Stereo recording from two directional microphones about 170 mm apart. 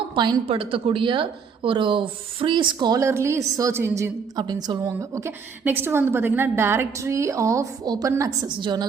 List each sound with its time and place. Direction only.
0.1 s a woman's voice: 30° right (ahead or behind)